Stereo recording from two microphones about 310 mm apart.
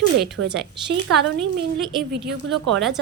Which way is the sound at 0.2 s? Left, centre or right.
Right.